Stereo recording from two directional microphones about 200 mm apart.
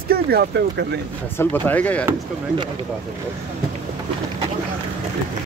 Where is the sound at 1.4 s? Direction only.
10° left (ahead or behind).